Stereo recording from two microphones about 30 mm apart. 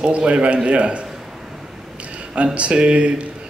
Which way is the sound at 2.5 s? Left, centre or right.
Right.